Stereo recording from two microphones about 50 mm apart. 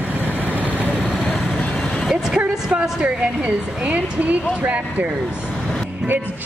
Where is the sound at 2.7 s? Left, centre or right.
Right.